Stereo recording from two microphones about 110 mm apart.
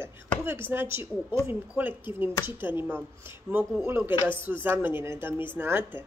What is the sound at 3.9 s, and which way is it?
A woman's voice, 20° right (ahead or behind).